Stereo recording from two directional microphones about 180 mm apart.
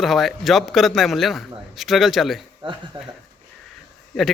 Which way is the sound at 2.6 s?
25° right (ahead or behind).